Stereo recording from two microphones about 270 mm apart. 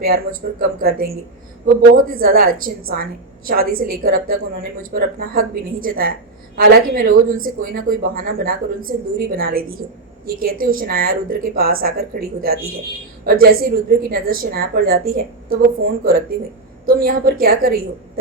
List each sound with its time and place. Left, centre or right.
0.0 s a woman's voice: right
16.8 s a woman's voice: right